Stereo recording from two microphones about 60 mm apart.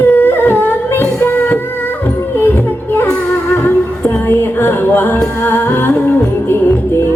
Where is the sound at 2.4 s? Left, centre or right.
Left.